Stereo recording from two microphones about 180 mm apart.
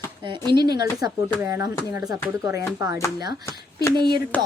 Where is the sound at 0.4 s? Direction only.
25° right (ahead or behind).